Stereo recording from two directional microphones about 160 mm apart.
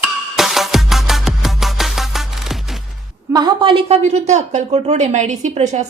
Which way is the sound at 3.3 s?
25° right (ahead or behind).